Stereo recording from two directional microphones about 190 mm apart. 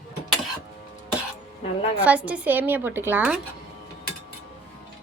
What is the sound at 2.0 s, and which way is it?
A woman's voice, 5° right (ahead or behind).